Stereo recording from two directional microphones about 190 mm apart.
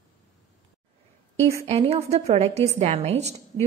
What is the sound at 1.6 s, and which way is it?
A woman's voice, 35° right (ahead or behind).